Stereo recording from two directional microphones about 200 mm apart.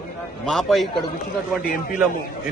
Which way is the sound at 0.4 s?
Centre (ahead or behind).